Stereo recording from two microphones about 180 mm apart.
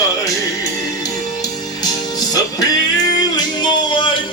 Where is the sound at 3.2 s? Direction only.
25° left (ahead or behind).